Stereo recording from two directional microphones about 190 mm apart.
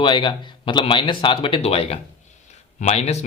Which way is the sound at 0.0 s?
25° left (ahead or behind).